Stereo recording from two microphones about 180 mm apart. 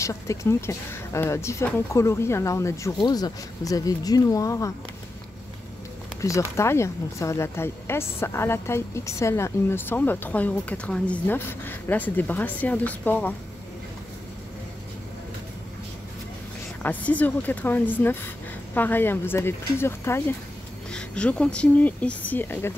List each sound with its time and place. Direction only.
0.0 s speech: 15° left (ahead or behind)
6.2 s speech: 15° left (ahead or behind)
16.8 s speech: 10° left (ahead or behind)